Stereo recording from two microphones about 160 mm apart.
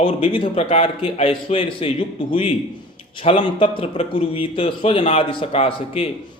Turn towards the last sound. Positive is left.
turn(degrees=40)  # may be behind; listen again after turning